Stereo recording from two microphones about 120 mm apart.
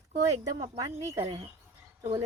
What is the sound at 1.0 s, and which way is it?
Speech, 25° right (ahead or behind).